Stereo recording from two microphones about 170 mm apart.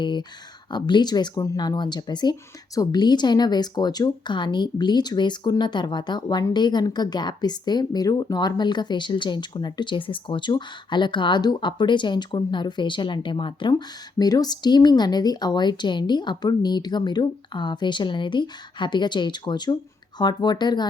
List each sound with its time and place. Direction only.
0.0 s speech: 25° left (ahead or behind)